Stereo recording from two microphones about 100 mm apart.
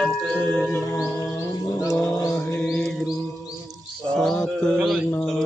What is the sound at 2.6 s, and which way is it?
Music, 5° left (ahead or behind).